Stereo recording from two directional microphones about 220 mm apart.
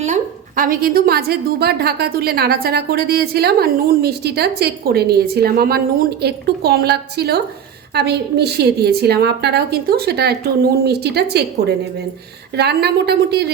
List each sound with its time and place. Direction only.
0.0 s a woman's voice: 35° right (ahead or behind)